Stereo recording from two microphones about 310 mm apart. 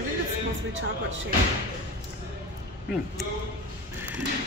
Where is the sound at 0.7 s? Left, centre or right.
Right.